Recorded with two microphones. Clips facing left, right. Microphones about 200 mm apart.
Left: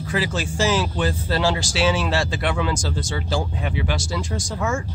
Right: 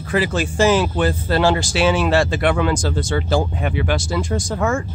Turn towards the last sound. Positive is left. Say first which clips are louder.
# right 5 dB
turn(degrees=-55)  # may be behind; listen again after turning